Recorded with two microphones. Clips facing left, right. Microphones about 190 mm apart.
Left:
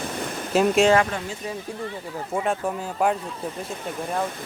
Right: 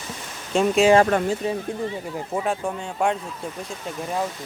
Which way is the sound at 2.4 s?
5° left (ahead or behind).